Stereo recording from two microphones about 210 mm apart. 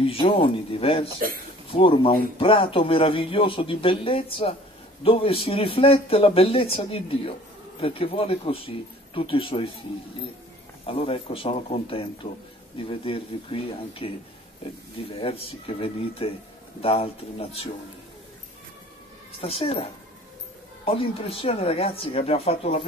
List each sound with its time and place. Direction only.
0.0 s speech: 25° left (ahead or behind)
10.9 s speech: 25° left (ahead or behind)
15.1 s speech: 25° left (ahead or behind)
19.4 s speech: 25° left (ahead or behind)